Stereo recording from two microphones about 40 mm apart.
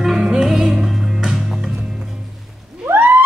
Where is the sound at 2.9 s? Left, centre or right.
Right.